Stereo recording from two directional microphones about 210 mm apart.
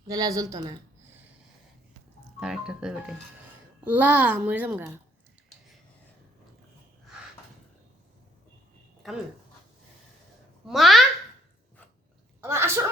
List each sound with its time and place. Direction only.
0.1 s a child's voice: 15° right (ahead or behind)
2.4 s a child's voice: 5° right (ahead or behind)
10.7 s speech: centre (ahead or behind)
12.4 s a sound: 10° right (ahead or behind)